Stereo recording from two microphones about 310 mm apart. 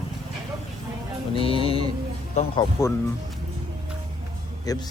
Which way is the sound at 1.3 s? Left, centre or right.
Centre.